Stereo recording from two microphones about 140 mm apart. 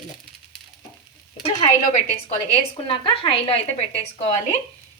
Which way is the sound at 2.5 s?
40° left (ahead or behind).